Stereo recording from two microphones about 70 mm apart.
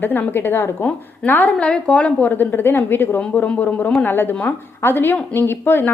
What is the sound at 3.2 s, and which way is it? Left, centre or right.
A woman's voice, centre.